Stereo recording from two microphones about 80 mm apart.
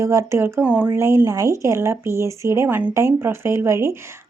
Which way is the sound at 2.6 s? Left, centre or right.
Right.